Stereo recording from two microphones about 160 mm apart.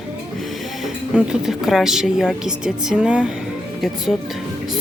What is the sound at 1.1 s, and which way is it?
A woman's voice, 5° right (ahead or behind).